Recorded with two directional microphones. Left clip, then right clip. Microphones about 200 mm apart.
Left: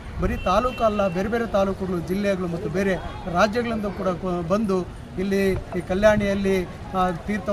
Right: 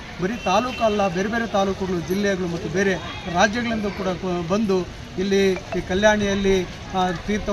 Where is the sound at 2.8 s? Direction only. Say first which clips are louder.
Right 3 dB; 20° left (ahead or behind).